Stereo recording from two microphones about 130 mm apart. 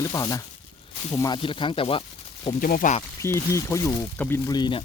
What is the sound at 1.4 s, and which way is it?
Speech, 40° left (ahead or behind).